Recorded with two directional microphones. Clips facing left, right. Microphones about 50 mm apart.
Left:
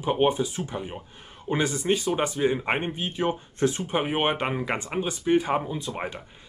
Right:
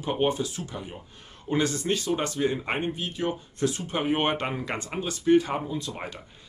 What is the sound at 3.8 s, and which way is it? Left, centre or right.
Speech, centre.